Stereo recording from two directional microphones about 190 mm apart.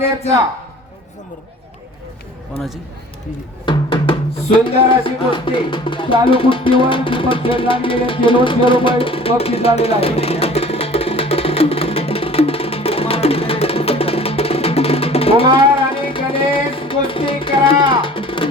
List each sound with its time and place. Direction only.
3.7 s music: 25° left (ahead or behind)